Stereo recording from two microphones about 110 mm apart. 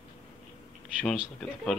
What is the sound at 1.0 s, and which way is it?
Speech, 5° left (ahead or behind).